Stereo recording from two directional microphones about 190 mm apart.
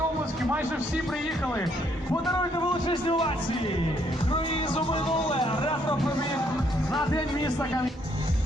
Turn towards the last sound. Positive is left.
turn(degrees=20)  # may be behind; listen again after turning